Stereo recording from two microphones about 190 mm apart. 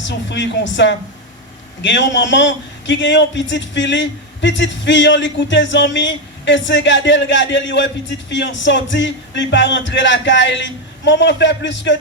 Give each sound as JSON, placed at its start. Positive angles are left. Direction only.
{"t": 0.0, "sound": "a man's voice", "side_deg": 70}